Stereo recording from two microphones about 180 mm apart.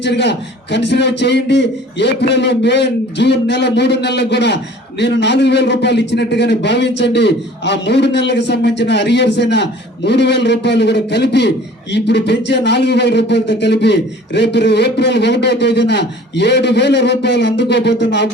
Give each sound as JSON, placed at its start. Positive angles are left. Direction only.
{"t": 0.0, "sound": "a man's voice", "side_deg": 75}